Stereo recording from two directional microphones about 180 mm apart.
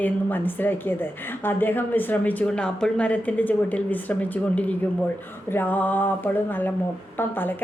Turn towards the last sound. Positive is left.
turn(degrees=10)  # may be behind; listen again after turning